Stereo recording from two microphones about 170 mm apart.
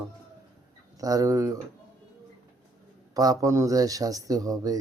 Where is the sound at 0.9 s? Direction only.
20° right (ahead or behind).